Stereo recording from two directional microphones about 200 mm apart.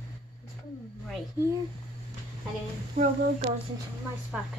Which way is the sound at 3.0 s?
45° right (ahead or behind).